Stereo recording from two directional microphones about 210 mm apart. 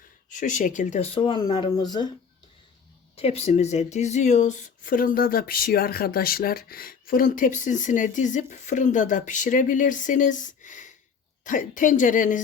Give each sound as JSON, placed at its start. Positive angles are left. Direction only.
{"t": 0.3, "sound": "speech", "side_deg": 35}
{"t": 3.2, "sound": "speech", "side_deg": 30}